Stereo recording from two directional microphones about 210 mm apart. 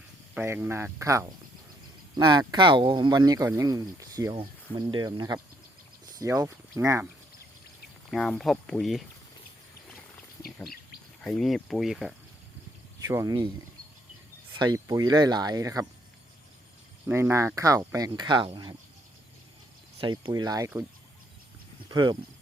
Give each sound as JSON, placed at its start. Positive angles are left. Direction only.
{"t": 0.3, "sound": "speech", "side_deg": -10}
{"t": 8.1, "sound": "speech", "side_deg": 0}
{"t": 11.2, "sound": "speech", "side_deg": 0}
{"t": 13.1, "sound": "speech", "side_deg": -15}
{"t": 14.5, "sound": "speech", "side_deg": -20}
{"t": 17.1, "sound": "speech", "side_deg": -10}
{"t": 20.0, "sound": "speech", "side_deg": -20}
{"t": 21.8, "sound": "speech", "side_deg": -20}